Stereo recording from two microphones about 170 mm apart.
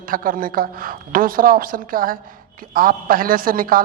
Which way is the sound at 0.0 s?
55° right (ahead or behind).